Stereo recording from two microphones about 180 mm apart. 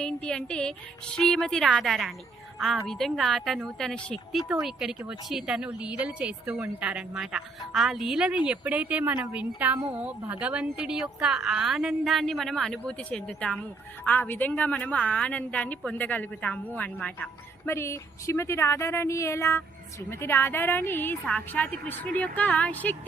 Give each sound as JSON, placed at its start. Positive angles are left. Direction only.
{"t": 0.0, "sound": "a woman's voice", "side_deg": 5}